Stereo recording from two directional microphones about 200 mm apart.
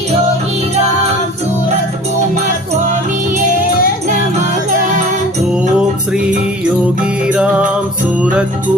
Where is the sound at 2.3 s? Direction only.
40° right (ahead or behind).